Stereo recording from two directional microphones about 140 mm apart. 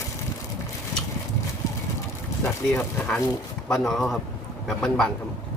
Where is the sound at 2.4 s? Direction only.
15° left (ahead or behind).